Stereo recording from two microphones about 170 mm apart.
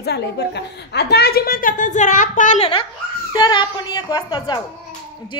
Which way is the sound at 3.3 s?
25° left (ahead or behind).